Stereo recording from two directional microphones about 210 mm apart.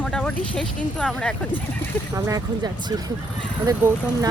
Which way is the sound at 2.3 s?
20° right (ahead or behind).